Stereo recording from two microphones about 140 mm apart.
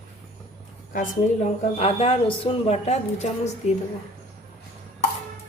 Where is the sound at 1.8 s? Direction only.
45° left (ahead or behind).